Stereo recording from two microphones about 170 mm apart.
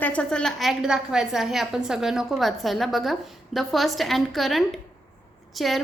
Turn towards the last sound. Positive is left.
turn(degrees=0)  # may be behind; listen again after turning